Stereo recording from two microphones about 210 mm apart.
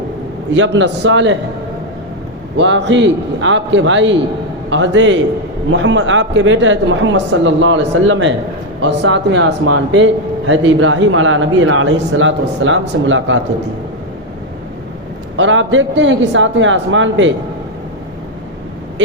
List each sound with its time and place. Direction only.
0.5 s speech: 60° right (ahead or behind)
2.6 s speech: 60° right (ahead or behind)
15.4 s speech: 65° right (ahead or behind)